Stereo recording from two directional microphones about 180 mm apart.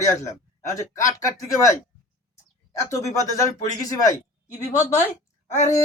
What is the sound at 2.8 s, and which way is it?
A man's voice, 15° left (ahead or behind).